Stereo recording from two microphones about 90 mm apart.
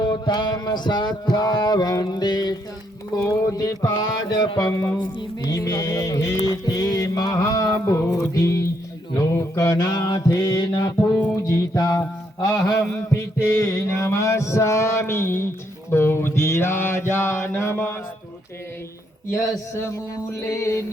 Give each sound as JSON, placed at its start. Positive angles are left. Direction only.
{"t": 0.0, "sound": "a sound", "side_deg": 55}
{"t": 3.2, "sound": "music", "side_deg": 40}
{"t": 9.1, "sound": "a sound", "side_deg": 35}
{"t": 11.4, "sound": "music", "side_deg": 35}
{"t": 12.7, "sound": "mantra", "side_deg": 25}
{"t": 13.5, "sound": "music", "side_deg": 35}
{"t": 15.9, "sound": "mantra", "side_deg": 25}
{"t": 19.3, "sound": "music", "side_deg": 30}